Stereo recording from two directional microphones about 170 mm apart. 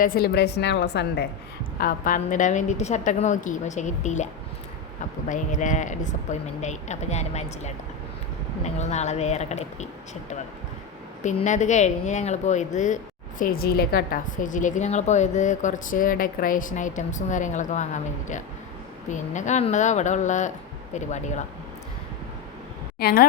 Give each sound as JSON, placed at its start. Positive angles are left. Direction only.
{"t": 0.0, "sound": "a woman's voice", "side_deg": 60}
{"t": 1.8, "sound": "a woman's voice", "side_deg": 55}
{"t": 5.3, "sound": "a woman's voice", "side_deg": 50}
{"t": 13.4, "sound": "a woman's voice", "side_deg": 60}
{"t": 23.0, "sound": "speech", "side_deg": 65}